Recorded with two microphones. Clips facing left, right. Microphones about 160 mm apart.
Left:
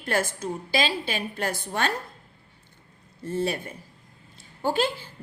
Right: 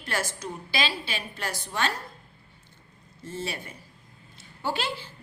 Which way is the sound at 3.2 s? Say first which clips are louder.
Left 7 dB; 55° left (ahead or behind).